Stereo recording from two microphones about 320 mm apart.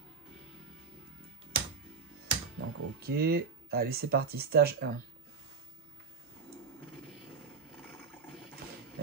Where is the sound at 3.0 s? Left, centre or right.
Right.